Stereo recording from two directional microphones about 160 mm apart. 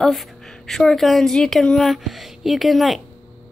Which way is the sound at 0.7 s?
Centre (ahead or behind).